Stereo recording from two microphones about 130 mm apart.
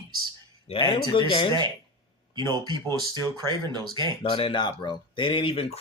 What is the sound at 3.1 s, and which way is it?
Speech, 35° right (ahead or behind).